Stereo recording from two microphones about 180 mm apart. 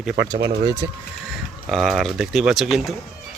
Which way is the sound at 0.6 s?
20° right (ahead or behind).